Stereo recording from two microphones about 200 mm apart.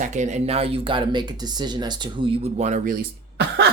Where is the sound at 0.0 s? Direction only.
35° right (ahead or behind); by 2.5 s 20° right (ahead or behind).